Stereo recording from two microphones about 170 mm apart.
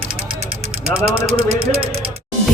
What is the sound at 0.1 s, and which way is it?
Vehicle, 30° right (ahead or behind).